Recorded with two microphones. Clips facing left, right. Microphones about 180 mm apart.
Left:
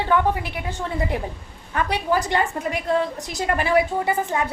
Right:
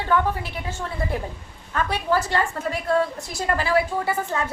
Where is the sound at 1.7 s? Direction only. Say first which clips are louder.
Left 1 dB; 15° left (ahead or behind).